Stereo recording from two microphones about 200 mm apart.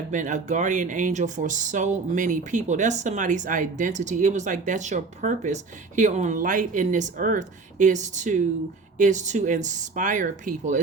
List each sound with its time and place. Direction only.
0.1 s speech: 40° right (ahead or behind)